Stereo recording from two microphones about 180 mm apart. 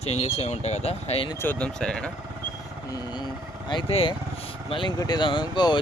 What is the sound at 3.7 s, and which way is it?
Speech, 30° left (ahead or behind).